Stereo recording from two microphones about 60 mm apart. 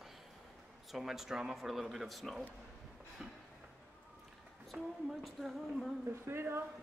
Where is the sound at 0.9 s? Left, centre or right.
Centre.